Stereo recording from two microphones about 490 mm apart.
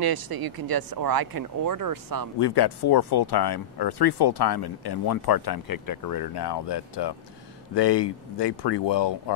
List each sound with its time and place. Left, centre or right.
0.0 s speech: right
2.3 s speech: left